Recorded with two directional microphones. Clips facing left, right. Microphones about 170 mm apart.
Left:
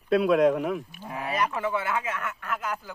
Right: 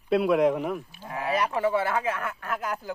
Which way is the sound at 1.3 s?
30° right (ahead or behind).